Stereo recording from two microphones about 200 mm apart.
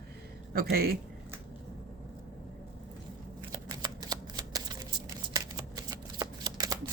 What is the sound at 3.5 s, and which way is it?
Shuffling cards, 20° right (ahead or behind).